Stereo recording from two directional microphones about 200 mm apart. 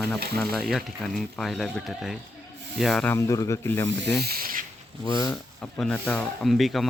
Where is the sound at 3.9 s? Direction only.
60° right (ahead or behind).